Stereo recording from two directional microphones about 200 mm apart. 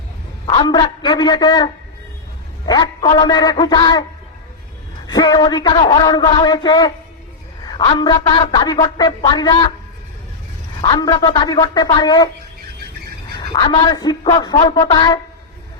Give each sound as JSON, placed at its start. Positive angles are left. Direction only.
{"t": 0.4, "sound": "a woman's voice", "side_deg": 25}
{"t": 5.0, "sound": "a woman's voice", "side_deg": 20}
{"t": 10.8, "sound": "a woman's voice", "side_deg": 25}
{"t": 13.3, "sound": "a woman's voice", "side_deg": 20}